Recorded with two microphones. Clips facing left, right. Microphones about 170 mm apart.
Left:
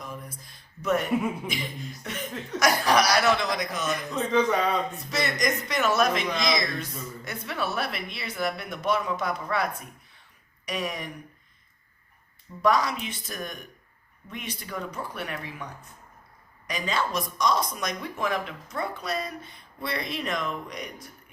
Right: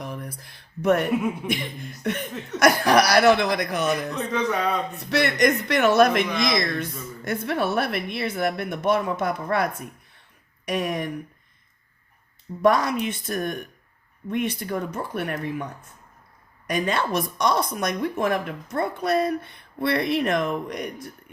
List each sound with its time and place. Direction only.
0.0 s a sound: 65° right (ahead or behind)
1.5 s speech: 60° right (ahead or behind)
4.1 s speech: centre (ahead or behind)
4.9 s speech: 65° right (ahead or behind)
12.6 s speech: 55° right (ahead or behind)
16.6 s speech: 55° right (ahead or behind)